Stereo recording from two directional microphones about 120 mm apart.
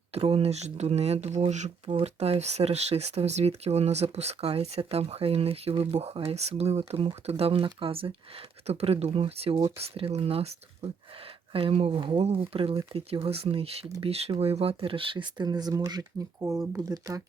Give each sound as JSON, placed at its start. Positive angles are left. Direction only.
{"t": 0.1, "sound": "speech", "side_deg": -55}
{"t": 2.0, "sound": "speech", "side_deg": -60}
{"t": 11.5, "sound": "speech", "side_deg": -50}